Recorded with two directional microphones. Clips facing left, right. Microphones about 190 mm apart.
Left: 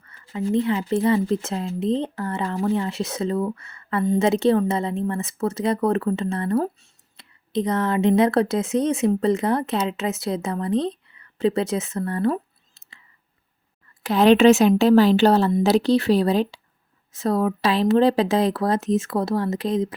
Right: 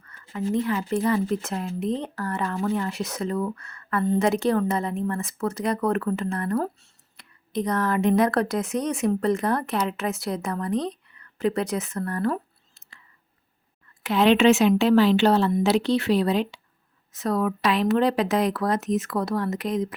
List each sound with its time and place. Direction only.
0.3 s speech: 25° left (ahead or behind)
14.0 s speech: 40° left (ahead or behind)